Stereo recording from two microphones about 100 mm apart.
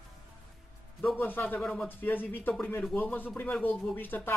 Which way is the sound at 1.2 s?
20° left (ahead or behind).